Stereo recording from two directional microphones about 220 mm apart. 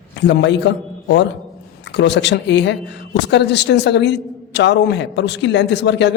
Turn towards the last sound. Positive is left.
turn(degrees=50)  # may be behind; listen again after turning